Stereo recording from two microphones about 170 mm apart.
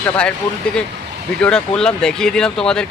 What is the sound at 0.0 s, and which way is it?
Speech, 5° left (ahead or behind).